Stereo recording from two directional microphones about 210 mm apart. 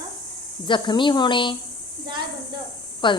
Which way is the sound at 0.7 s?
20° left (ahead or behind).